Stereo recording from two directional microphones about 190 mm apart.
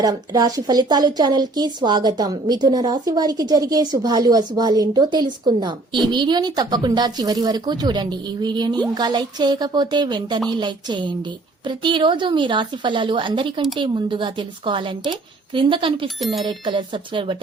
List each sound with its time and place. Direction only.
0.0 s a woman's voice: 20° right (ahead or behind)
16.0 s speech: centre (ahead or behind)
16.5 s a woman's voice: 25° right (ahead or behind)